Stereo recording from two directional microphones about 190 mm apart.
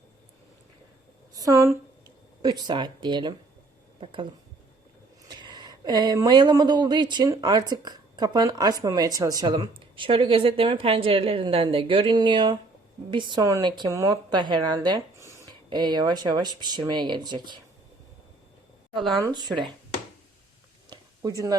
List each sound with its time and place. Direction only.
1.4 s speech: 15° right (ahead or behind)
5.3 s speech: 25° right (ahead or behind)
19.2 s speech: 20° right (ahead or behind)
20.9 s a sound: 20° right (ahead or behind)